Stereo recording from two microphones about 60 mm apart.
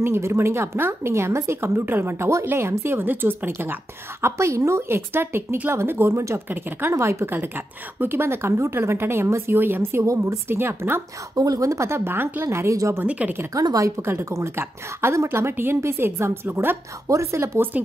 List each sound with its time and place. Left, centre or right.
0.0 s a woman's voice: right
4.2 s a woman's voice: right
7.2 s a woman's voice: right
10.0 s a woman's voice: right
11.3 s speech: right
11.9 s a woman's voice: right
12.5 s speech: right
13.0 s speech: right
13.5 s speech: right
14.3 s a woman's voice: right
17.1 s speech: right
17.7 s speech: right